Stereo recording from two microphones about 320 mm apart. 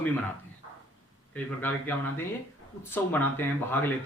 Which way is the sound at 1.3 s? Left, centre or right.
Centre.